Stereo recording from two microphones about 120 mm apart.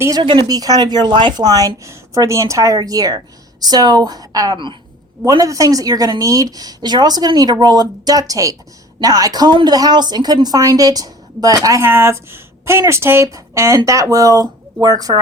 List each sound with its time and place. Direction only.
0.2 s a woman's voice: 40° right (ahead or behind)
5.2 s a woman's voice: 30° right (ahead or behind)